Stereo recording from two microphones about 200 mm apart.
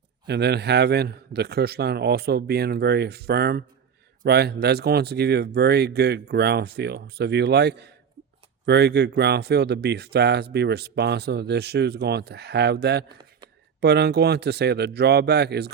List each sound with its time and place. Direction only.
0.3 s speech: 55° right (ahead or behind)